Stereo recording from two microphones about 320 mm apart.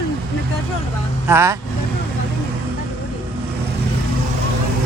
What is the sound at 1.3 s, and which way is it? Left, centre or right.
Speech, centre.